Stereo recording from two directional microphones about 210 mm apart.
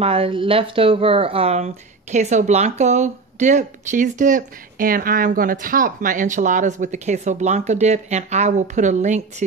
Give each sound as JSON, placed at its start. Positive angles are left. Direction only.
{"t": 0.0, "sound": "speech", "side_deg": -25}